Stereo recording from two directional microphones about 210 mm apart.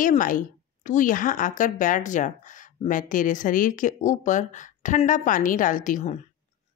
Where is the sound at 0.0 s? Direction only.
40° left (ahead or behind).